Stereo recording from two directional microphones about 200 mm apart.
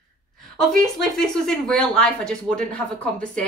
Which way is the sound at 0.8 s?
Centre (ahead or behind).